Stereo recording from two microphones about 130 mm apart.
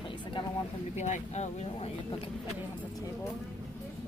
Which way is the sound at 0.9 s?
65° left (ahead or behind).